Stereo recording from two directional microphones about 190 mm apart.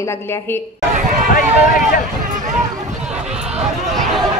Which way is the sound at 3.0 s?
5° right (ahead or behind).